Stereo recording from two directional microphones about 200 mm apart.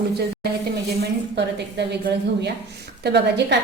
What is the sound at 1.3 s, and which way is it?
A woman's voice, 55° right (ahead or behind).